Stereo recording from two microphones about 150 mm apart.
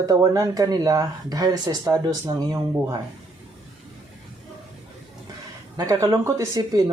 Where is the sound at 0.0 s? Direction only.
20° right (ahead or behind).